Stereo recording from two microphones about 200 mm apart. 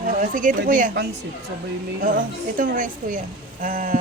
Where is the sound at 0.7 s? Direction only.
45° right (ahead or behind).